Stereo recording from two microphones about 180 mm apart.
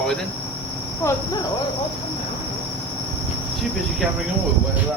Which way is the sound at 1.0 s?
15° left (ahead or behind).